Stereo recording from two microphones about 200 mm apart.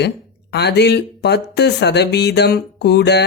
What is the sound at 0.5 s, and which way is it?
Speech, 55° left (ahead or behind).